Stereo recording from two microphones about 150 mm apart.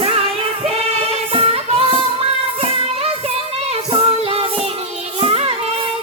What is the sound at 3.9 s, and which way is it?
Child singing, 40° right (ahead or behind).